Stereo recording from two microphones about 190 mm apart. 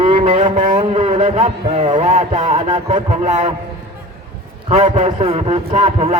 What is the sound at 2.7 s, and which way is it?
Speech, 25° right (ahead or behind).